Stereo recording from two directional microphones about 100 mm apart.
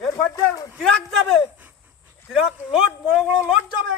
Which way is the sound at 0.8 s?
5° left (ahead or behind).